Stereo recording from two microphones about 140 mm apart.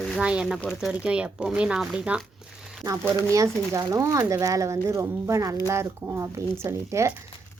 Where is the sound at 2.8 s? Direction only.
20° right (ahead or behind).